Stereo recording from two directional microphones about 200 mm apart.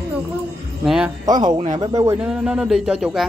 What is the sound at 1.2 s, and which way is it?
Speech, 20° right (ahead or behind).